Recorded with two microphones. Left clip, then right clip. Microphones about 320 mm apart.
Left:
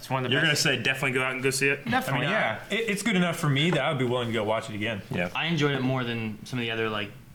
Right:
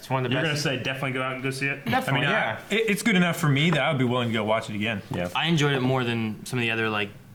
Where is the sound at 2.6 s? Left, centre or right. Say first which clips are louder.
Right 4 dB; centre.